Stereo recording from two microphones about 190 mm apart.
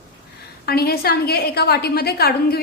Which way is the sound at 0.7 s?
55° left (ahead or behind).